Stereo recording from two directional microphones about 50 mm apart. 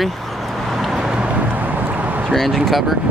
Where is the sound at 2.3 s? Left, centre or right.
Centre.